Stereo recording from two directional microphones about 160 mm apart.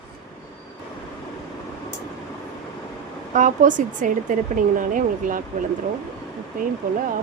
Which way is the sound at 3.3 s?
55° right (ahead or behind).